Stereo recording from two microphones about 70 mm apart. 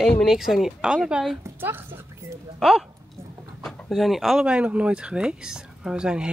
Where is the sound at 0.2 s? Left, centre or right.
Centre.